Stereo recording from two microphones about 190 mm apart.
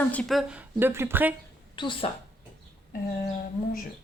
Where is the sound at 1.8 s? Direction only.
25° left (ahead or behind).